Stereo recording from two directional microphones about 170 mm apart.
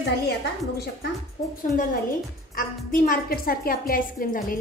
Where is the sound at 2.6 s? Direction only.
55° left (ahead or behind).